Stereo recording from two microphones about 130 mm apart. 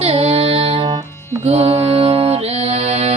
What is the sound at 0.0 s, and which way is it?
Music, 50° right (ahead or behind).